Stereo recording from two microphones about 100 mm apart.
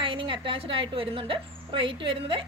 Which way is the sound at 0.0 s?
60° right (ahead or behind).